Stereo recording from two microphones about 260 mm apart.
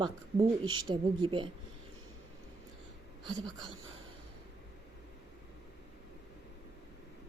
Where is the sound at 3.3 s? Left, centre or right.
Centre.